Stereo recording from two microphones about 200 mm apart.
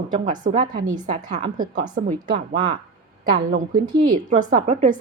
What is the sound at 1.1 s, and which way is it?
A woman's voice, 35° right (ahead or behind).